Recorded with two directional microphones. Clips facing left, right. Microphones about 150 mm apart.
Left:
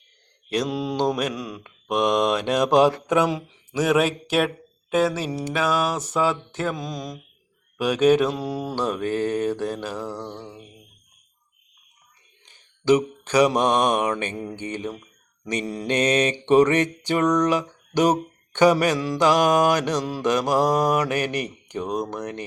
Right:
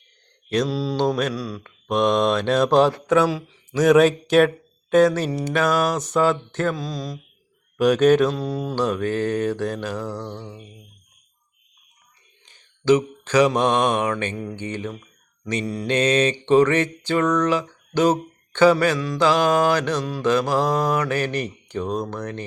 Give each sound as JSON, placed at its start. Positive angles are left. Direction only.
{"t": 0.5, "sound": "mantra", "side_deg": 15}
{"t": 12.8, "sound": "mantra", "side_deg": 10}